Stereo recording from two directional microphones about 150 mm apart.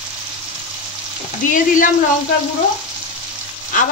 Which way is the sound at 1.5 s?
65° left (ahead or behind).